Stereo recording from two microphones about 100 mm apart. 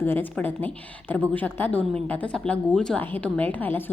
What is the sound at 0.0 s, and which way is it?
A woman's voice, 20° left (ahead or behind).